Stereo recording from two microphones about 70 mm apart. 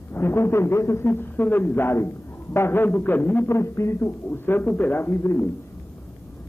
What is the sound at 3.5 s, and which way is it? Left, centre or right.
A man's voice, left.